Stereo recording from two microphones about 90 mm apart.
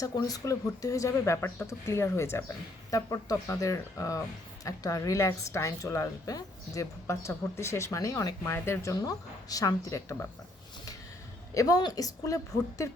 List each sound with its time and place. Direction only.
0.0 s a woman's voice: 40° left (ahead or behind)
8.4 s a woman's voice: 30° left (ahead or behind)
11.5 s a woman's voice: 40° left (ahead or behind)